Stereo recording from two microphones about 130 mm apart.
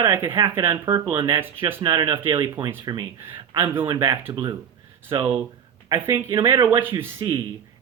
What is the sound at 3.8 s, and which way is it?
Speech, 35° right (ahead or behind).